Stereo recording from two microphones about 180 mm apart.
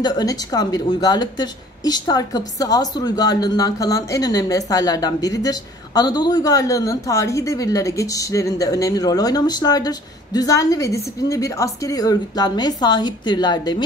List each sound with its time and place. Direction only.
0.0 s a woman's voice: 20° left (ahead or behind)